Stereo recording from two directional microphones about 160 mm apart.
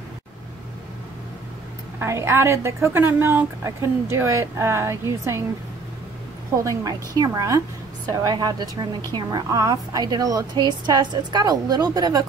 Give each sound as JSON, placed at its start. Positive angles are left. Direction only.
{"t": 2.0, "sound": "a woman's voice", "side_deg": -15}
{"t": 6.5, "sound": "a woman's voice", "side_deg": -20}